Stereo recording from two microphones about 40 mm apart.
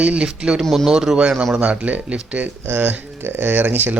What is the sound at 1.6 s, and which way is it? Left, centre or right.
Speech, right.